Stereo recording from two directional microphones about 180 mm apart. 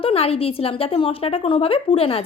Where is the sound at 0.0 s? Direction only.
35° left (ahead or behind).